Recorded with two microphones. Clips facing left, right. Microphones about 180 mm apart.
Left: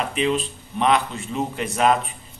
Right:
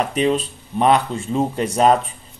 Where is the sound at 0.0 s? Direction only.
40° right (ahead or behind).